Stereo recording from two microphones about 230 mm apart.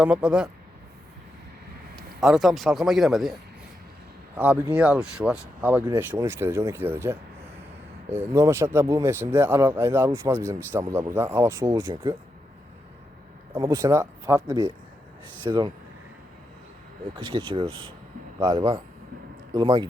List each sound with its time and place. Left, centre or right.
0.0 s speech: centre
2.2 s speech: centre
4.4 s speech: centre
13.5 s speech: centre
17.2 s speech: right